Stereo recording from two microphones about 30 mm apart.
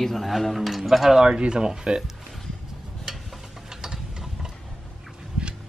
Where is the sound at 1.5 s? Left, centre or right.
Right.